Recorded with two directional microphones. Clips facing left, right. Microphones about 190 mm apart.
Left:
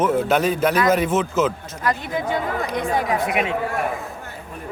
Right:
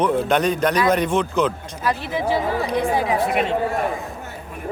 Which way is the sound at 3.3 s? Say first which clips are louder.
Right 1 dB; 10° left (ahead or behind).